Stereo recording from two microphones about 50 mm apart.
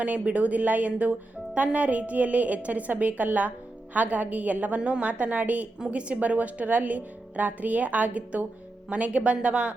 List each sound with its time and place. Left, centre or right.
0.0 s speech: right